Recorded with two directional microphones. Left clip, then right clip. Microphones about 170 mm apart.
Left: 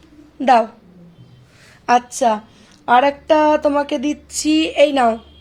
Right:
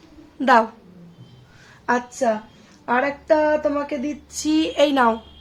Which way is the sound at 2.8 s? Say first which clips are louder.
Left 7 dB; 20° left (ahead or behind).